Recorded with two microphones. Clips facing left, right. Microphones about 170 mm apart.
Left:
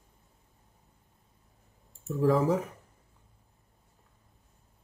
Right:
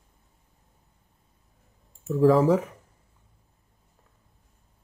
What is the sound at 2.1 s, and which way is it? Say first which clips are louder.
Speech: right 6 dB; 90° right.